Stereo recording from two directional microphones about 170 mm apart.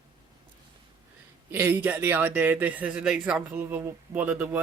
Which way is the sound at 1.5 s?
10° right (ahead or behind).